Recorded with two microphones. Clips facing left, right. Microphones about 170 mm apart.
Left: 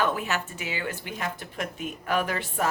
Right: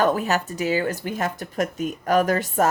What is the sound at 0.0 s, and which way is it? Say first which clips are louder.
Speech: right 6 dB; 40° right (ahead or behind).